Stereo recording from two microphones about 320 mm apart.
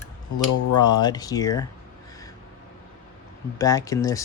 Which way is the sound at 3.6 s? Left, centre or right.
Centre.